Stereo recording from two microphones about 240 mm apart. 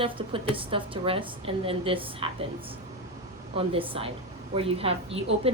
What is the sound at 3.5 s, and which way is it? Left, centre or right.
A woman's voice, right.